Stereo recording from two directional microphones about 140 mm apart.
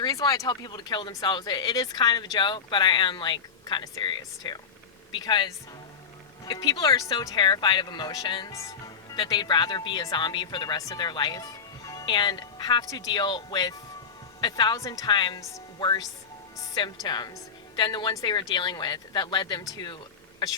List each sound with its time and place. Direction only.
0.0 s speech: 25° left (ahead or behind)